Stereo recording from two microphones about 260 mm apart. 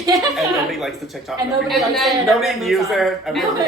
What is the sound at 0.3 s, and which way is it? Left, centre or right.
A woman's voice, centre.